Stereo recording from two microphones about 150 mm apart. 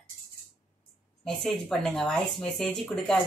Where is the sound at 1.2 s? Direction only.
5° left (ahead or behind).